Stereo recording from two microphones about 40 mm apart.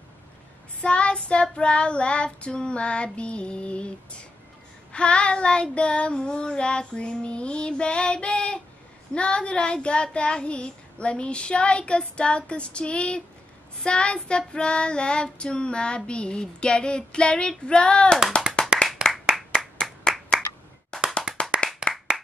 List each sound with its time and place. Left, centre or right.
0.7 s child singing: left
18.6 s clapping: left
19.0 s clapping: centre
20.1 s clapping: centre
20.9 s clapping: left
21.9 s clapping: centre